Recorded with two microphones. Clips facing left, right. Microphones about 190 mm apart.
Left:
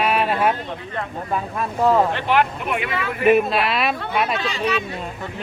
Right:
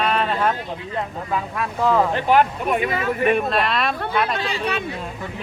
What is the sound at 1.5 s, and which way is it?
Speech, 5° left (ahead or behind).